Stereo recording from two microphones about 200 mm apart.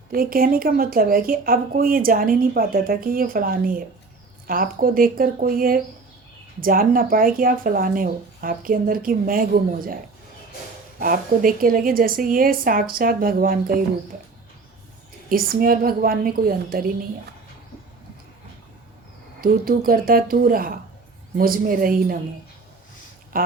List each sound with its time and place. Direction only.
0.1 s a woman's voice: 45° right (ahead or behind)
11.0 s a woman's voice: 45° right (ahead or behind)
15.3 s a woman's voice: 45° right (ahead or behind)
19.4 s a woman's voice: 45° right (ahead or behind)
23.3 s a sound: 45° right (ahead or behind)